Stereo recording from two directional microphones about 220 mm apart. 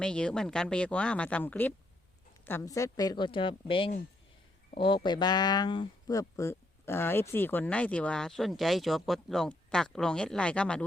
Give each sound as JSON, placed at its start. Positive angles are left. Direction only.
{"t": 0.0, "sound": "speech", "side_deg": 5}
{"t": 5.0, "sound": "speech", "side_deg": 20}